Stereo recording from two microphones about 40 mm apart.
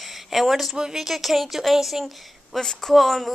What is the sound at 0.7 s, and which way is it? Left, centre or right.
Speech, centre.